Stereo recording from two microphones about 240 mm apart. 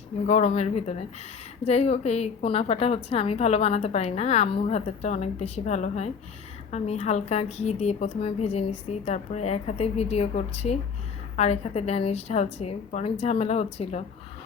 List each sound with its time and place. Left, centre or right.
0.3 s a woman's voice: left